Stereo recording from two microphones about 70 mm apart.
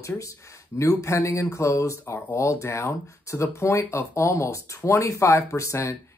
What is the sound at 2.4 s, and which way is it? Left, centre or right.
Speech, left.